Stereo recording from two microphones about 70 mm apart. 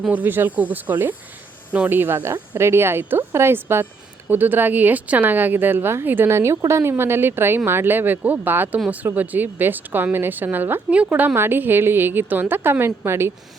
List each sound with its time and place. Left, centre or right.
0.0 s speech: right